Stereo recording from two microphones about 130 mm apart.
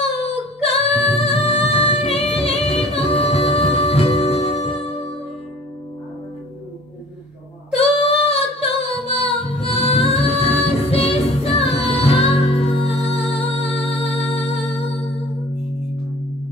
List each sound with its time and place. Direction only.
0.0 s female singing: 50° left (ahead or behind)
7.7 s singing: 50° left (ahead or behind)
13.1 s music: 50° left (ahead or behind)